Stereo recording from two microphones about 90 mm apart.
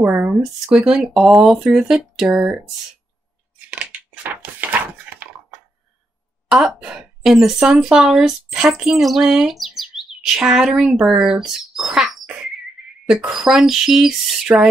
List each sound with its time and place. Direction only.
0.0 s speech: 25° right (ahead or behind)
0.4 s a woman's voice: 10° right (ahead or behind)
3.5 s a sound: 15° right (ahead or behind)
6.5 s a woman's voice: 5° right (ahead or behind)
14.5 s speech: 20° right (ahead or behind)